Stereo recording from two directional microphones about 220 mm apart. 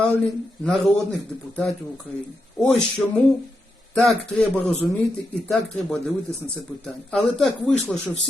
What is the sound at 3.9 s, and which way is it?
Speech, centre (ahead or behind).